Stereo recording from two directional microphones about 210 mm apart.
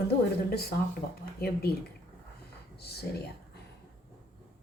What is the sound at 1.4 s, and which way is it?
Speech, 50° left (ahead or behind).